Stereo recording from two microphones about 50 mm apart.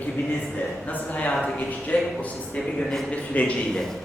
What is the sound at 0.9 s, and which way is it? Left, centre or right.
A man's voice, left.